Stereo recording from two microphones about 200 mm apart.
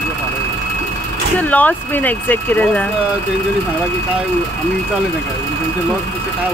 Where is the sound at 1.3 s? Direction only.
5° left (ahead or behind).